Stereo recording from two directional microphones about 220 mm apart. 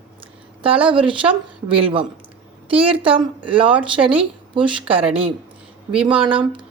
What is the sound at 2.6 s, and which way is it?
A woman's voice, 25° right (ahead or behind).